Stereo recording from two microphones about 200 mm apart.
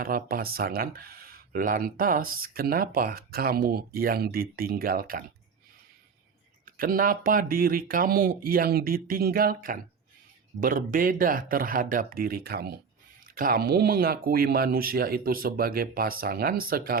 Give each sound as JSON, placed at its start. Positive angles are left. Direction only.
{"t": 0.0, "sound": "speech", "side_deg": -45}
{"t": 6.7, "sound": "speech", "side_deg": -45}